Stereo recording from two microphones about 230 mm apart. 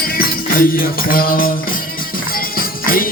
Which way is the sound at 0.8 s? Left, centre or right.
Left.